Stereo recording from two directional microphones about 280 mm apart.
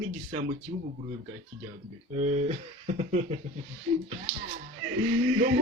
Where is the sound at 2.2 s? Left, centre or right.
Right.